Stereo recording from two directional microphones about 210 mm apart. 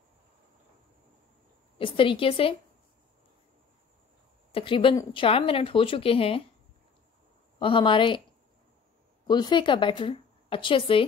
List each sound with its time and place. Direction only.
1.8 s speech: 25° left (ahead or behind)
4.5 s speech: 25° left (ahead or behind)
7.5 s speech: 25° left (ahead or behind)
9.3 s speech: 20° left (ahead or behind)